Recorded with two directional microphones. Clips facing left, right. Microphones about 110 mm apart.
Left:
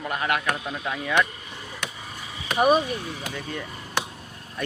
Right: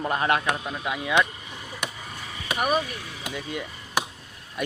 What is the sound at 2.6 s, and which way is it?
Speech, 25° left (ahead or behind).